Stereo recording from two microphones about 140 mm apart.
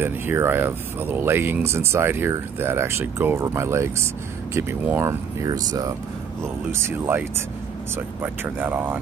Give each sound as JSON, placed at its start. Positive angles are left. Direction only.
{"t": 0.0, "sound": "speech", "side_deg": -15}